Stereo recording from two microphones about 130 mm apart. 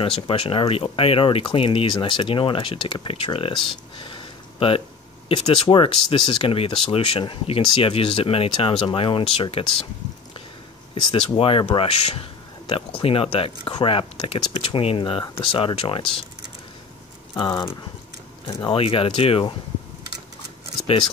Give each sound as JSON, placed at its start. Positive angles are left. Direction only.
{"t": 0.0, "sound": "speech", "side_deg": 45}
{"t": 3.6, "sound": "a sound", "side_deg": 40}
{"t": 5.3, "sound": "speech", "side_deg": 45}
{"t": 11.0, "sound": "speech", "side_deg": 40}
{"t": 17.4, "sound": "speech", "side_deg": 35}